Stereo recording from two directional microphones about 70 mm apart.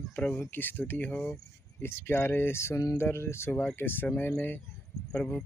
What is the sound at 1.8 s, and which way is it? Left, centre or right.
Speech, left.